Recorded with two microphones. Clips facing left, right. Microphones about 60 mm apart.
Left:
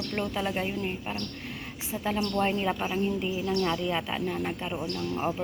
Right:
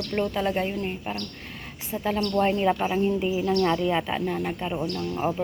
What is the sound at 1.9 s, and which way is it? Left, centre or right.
Speech, centre.